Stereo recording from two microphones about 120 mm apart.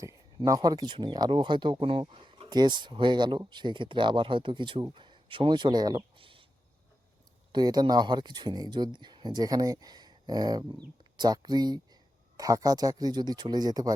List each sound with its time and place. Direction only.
0.0 s speech: 25° right (ahead or behind)
6.1 s a sound: 45° right (ahead or behind)
7.5 s speech: 35° right (ahead or behind)